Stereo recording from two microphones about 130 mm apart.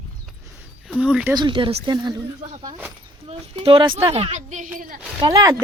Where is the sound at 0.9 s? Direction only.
10° right (ahead or behind).